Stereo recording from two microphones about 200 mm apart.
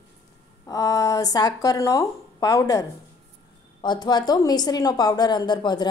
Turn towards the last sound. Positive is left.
turn(degrees=20)  # may be behind; listen again after turning